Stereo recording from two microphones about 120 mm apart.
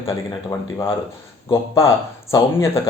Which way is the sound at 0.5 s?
25° left (ahead or behind).